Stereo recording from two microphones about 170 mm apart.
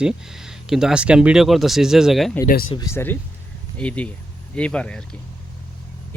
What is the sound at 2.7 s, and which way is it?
Speech, 15° left (ahead or behind).